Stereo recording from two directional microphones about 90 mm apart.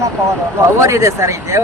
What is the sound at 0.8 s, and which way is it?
Speech, 35° right (ahead or behind).